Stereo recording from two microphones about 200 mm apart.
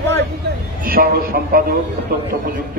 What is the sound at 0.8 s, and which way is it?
Speech, 45° right (ahead or behind).